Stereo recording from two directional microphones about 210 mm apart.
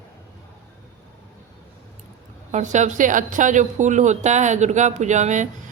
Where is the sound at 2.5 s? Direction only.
35° right (ahead or behind).